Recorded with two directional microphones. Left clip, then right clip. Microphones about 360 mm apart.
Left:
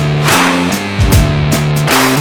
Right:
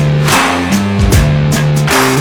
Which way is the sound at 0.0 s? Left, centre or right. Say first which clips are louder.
Left 1 dB; centre.